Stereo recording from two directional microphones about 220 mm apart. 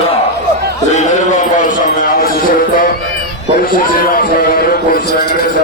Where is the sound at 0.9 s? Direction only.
35° left (ahead or behind).